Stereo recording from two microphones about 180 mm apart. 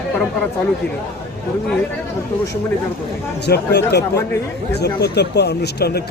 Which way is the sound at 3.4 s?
65° left (ahead or behind).